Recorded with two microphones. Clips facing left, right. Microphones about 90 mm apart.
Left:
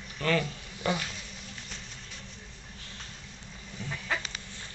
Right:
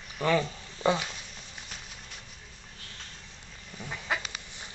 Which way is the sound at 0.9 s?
20° right (ahead or behind).